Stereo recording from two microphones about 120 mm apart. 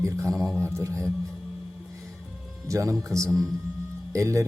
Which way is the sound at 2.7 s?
25° right (ahead or behind).